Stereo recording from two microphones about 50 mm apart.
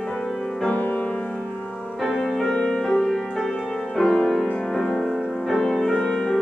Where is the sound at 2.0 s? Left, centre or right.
Centre.